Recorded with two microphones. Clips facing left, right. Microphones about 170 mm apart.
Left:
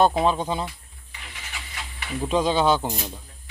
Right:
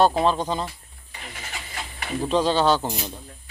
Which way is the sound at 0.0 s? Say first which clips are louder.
Even; 10° left (ahead or behind).